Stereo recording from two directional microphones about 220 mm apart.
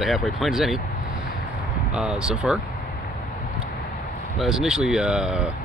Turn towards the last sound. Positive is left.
turn(degrees=-5)  # may be behind; listen again after turning